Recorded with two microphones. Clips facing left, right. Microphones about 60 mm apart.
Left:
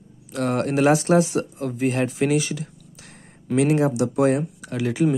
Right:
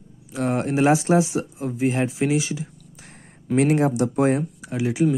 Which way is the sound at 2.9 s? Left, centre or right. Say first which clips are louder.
Even; right.